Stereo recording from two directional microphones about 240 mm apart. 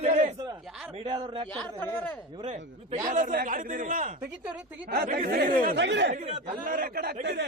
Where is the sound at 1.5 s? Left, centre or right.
Centre.